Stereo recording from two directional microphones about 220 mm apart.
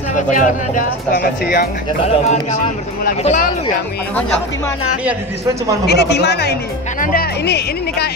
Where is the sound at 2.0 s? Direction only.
30° left (ahead or behind).